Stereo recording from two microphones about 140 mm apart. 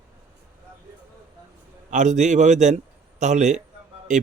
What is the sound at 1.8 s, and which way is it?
Speech, 60° right (ahead or behind).